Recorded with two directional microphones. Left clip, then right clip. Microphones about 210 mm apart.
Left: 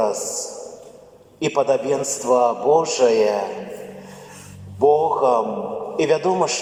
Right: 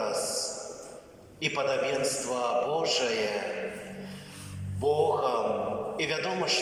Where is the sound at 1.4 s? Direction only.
55° left (ahead or behind).